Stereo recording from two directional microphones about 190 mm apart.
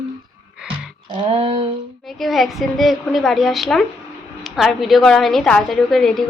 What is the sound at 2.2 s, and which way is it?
Speech, centre (ahead or behind).